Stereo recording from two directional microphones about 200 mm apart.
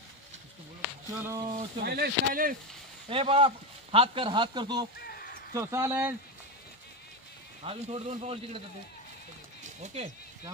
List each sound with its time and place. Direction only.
1.1 s speech: 15° right (ahead or behind)
1.8 s speech: 50° right (ahead or behind)
3.1 s speech: 30° right (ahead or behind)
5.0 s a sound: 45° left (ahead or behind)
5.5 s speech: 15° right (ahead or behind)
7.6 s a man's voice: 30° right (ahead or behind)
9.6 s horse: 35° right (ahead or behind)